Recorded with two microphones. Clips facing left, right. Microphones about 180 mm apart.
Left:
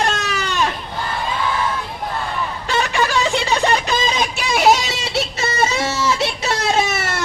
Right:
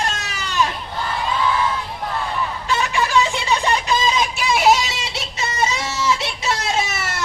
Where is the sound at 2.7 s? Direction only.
65° left (ahead or behind).